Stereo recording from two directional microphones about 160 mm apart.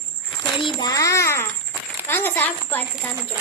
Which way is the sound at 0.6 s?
25° left (ahead or behind).